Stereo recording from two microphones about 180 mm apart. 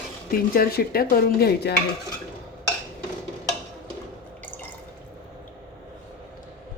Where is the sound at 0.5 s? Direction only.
55° left (ahead or behind).